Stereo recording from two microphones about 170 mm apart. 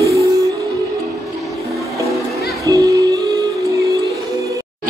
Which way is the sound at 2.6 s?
20° right (ahead or behind).